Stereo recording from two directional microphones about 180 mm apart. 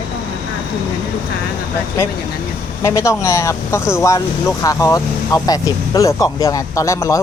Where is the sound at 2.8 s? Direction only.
15° left (ahead or behind).